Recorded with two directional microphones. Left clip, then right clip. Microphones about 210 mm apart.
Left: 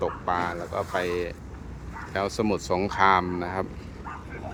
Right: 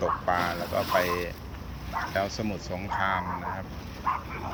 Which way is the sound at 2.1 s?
15° left (ahead or behind).